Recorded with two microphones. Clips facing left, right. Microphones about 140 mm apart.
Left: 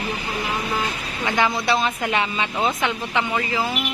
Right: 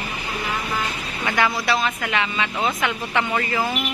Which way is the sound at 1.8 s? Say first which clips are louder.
Left 1 dB; 30° left (ahead or behind).